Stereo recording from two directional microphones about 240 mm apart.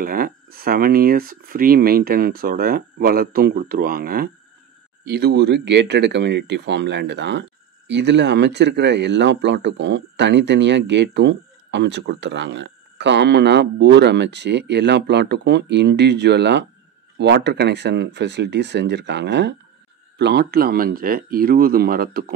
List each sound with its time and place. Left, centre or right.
0.0 s speech: right